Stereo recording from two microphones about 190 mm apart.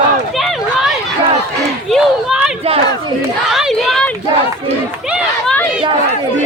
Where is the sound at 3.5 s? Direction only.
Centre (ahead or behind).